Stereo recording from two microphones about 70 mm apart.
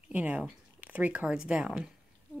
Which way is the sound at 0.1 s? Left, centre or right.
Centre.